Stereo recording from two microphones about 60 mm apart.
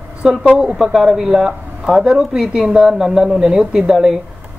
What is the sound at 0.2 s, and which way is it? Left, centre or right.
Speech, centre.